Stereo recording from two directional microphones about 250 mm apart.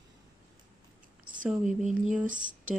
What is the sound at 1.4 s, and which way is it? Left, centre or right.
Speech, right.